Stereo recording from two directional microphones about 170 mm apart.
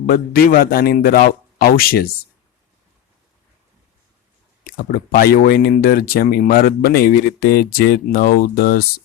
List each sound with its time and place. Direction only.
0.6 s speech: 60° left (ahead or behind)
4.6 s speech: 60° left (ahead or behind)